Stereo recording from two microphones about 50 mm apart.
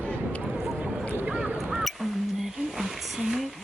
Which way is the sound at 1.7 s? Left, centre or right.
Centre.